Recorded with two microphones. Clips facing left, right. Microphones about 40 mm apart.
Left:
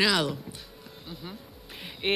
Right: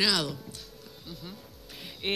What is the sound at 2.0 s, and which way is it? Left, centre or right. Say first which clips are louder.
Speech: left 4 dB; centre.